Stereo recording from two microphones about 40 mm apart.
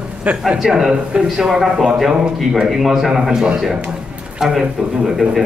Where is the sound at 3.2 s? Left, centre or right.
Right.